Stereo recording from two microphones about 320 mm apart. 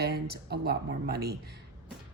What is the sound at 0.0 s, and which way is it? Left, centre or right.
A woman's voice, right.